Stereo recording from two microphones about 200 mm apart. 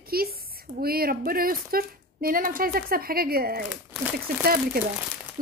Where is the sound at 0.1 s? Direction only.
50° right (ahead or behind).